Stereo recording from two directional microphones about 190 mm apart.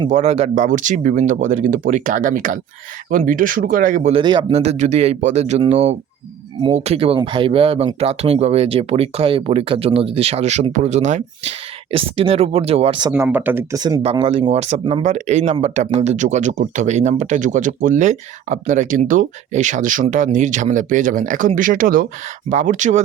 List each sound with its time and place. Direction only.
0.1 s speech: 35° right (ahead or behind)
4.1 s speech: 25° right (ahead or behind)
13.1 s speech: 10° right (ahead or behind)
14.0 s speech: 30° right (ahead or behind)